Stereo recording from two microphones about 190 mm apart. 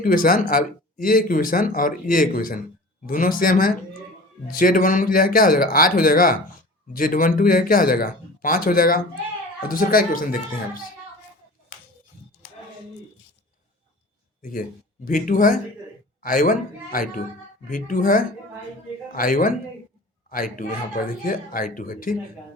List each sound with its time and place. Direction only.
0.0 s speech: 45° left (ahead or behind)
15.0 s speech: 45° left (ahead or behind)